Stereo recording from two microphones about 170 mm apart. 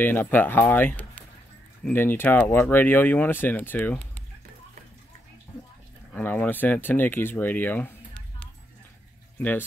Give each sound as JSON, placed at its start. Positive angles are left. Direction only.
{"t": 0.0, "sound": "speech", "side_deg": 10}
{"t": 6.1, "sound": "speech", "side_deg": 10}
{"t": 9.4, "sound": "speech", "side_deg": 10}